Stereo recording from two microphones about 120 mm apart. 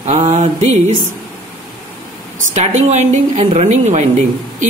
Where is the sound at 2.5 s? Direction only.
75° right (ahead or behind).